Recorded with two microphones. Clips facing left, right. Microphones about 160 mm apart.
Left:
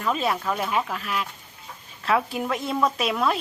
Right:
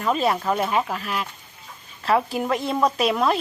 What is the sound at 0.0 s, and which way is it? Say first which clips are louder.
Speech: right 3 dB; centre (ahead or behind).